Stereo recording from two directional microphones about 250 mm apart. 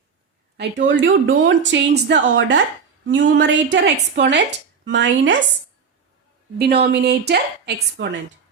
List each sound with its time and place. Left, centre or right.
0.5 s speech: right
6.6 s a woman's voice: right